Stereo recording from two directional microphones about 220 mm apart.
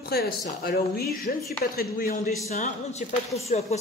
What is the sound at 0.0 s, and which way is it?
A woman's voice, 45° left (ahead or behind).